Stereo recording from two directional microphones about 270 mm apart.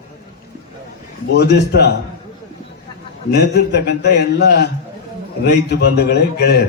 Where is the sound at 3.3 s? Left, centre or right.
Left.